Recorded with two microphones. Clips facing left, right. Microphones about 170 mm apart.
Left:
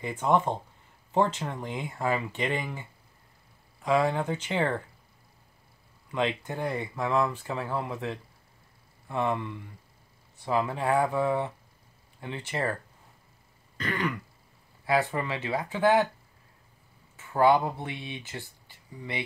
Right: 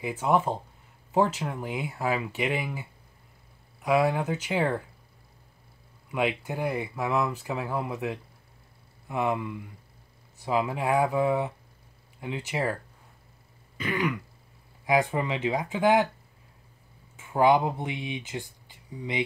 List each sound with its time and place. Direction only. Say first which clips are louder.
0.0 s speech: even; 5° right (ahead or behind)
6.1 s speech: right 1 dB; 10° right (ahead or behind)
13.7 s speech: right 2 dB; 10° right (ahead or behind)
17.2 s speech: right 1 dB; 15° right (ahead or behind)